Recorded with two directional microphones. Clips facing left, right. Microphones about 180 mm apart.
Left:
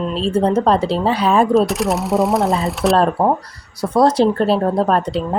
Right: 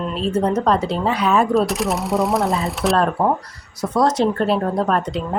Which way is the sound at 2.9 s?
25° left (ahead or behind).